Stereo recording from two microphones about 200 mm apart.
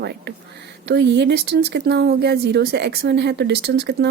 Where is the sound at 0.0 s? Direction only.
55° right (ahead or behind).